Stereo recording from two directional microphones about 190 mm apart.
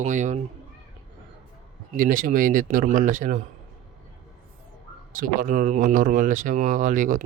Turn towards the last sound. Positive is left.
turn(degrees=-45)  # may be behind; listen again after turning